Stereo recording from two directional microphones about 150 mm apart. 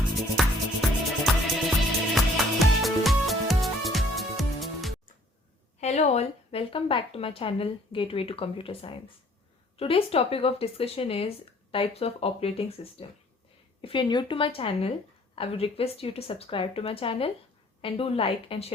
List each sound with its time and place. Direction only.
0.3 s music: centre (ahead or behind)
5.8 s speech: 45° left (ahead or behind)